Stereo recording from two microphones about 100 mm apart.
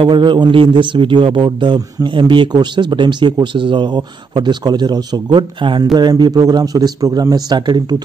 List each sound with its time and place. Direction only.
0.0 s a man's voice: 55° right (ahead or behind)